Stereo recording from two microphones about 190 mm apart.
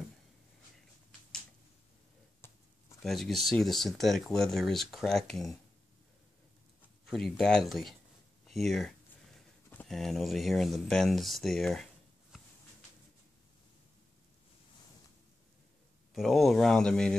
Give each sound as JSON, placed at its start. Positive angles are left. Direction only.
{"t": 2.4, "sound": "a sound", "side_deg": 10}
{"t": 3.0, "sound": "speech", "side_deg": 0}
{"t": 7.1, "sound": "speech", "side_deg": 0}
{"t": 16.1, "sound": "speech", "side_deg": 0}